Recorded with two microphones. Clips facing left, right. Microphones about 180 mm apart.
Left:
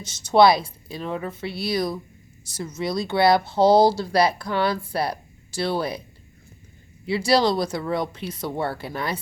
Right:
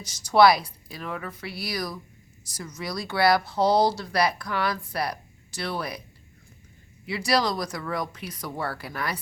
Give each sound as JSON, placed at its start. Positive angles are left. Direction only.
{"t": 0.0, "sound": "speech", "side_deg": 25}
{"t": 7.0, "sound": "speech", "side_deg": 30}